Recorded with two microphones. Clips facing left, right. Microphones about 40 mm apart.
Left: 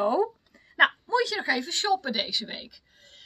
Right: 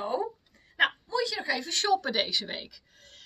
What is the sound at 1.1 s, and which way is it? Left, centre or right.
Speech, left.